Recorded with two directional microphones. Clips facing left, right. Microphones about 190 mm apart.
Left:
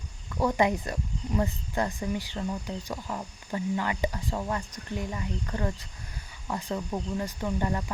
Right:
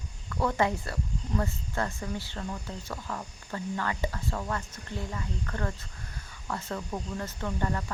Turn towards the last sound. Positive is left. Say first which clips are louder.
# left 2 dB
turn(degrees=15)  # may be behind; listen again after turning